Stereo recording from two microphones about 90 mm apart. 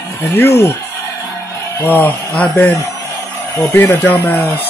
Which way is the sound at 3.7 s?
20° left (ahead or behind).